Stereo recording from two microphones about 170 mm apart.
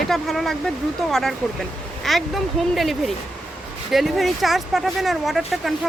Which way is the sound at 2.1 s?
Centre (ahead or behind).